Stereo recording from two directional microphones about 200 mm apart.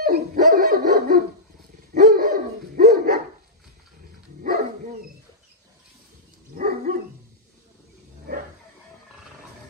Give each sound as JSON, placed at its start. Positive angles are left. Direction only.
{"t": 0.0, "sound": "dog", "side_deg": -45}
{"t": 4.4, "sound": "dog", "side_deg": -45}
{"t": 6.5, "sound": "dog", "side_deg": -45}